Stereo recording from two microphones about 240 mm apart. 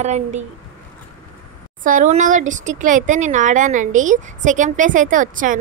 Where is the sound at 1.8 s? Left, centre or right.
Right.